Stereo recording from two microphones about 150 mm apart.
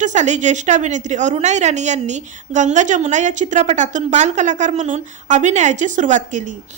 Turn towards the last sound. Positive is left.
turn(degrees=-55)  # may be behind; listen again after turning